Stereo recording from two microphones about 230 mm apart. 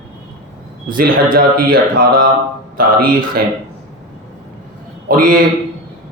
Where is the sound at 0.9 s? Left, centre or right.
Right.